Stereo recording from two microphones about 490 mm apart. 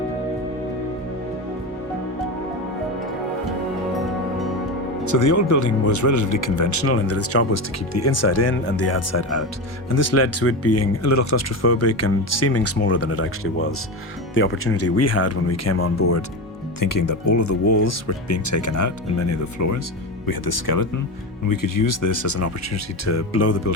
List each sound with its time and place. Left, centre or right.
5.0 s speech: left
16.8 s speech: left
20.2 s speech: left